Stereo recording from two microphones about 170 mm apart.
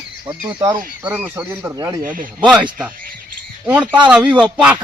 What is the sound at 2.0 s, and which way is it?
Speech, 55° right (ahead or behind).